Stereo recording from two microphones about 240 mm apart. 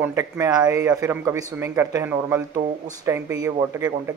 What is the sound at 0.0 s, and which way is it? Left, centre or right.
Speech, centre.